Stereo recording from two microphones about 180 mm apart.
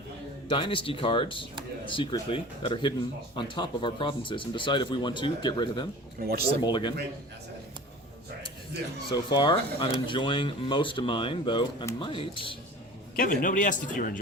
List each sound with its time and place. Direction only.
0.4 s speech: 30° left (ahead or behind)
6.1 s speech: 60° right (ahead or behind)
6.6 s speech: 25° left (ahead or behind)
9.0 s speech: 25° left (ahead or behind)
13.1 s speech: 50° left (ahead or behind)